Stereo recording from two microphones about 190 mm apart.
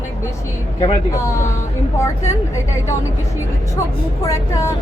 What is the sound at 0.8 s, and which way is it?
Speech, 15° left (ahead or behind).